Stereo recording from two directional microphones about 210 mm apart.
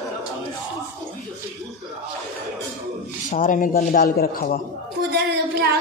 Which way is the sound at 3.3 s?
40° left (ahead or behind).